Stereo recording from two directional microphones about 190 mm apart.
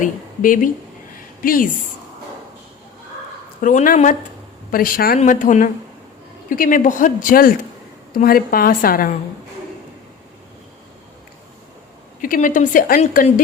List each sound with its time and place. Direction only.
0.0 s speech: 45° left (ahead or behind)
1.1 s a sound: 45° left (ahead or behind)
3.6 s a woman's voice: 45° left (ahead or behind)
12.2 s a woman's voice: 45° left (ahead or behind)